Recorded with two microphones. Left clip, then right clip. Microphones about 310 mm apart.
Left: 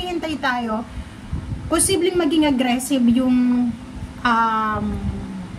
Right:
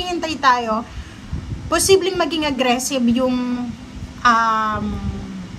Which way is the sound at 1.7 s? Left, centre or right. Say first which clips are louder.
Right 4 dB; centre.